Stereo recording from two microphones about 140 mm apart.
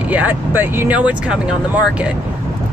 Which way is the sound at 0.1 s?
10° right (ahead or behind).